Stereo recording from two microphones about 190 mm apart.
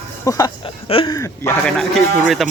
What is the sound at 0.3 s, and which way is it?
Speech, 20° left (ahead or behind).